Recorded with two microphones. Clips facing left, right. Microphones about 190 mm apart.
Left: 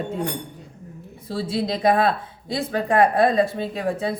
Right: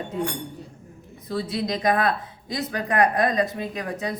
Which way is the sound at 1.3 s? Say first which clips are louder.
Left 2 dB; 30° left (ahead or behind).